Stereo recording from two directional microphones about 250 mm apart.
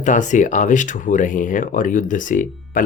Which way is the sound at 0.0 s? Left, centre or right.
Left.